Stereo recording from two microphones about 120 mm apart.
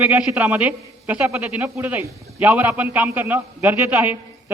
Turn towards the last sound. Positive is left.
turn(degrees=-15)  # may be behind; listen again after turning